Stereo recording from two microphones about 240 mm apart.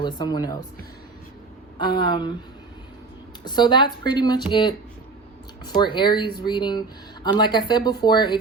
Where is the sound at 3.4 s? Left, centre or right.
Centre.